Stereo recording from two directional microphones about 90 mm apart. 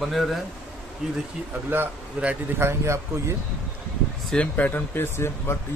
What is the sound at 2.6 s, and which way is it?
Speech, 30° right (ahead or behind).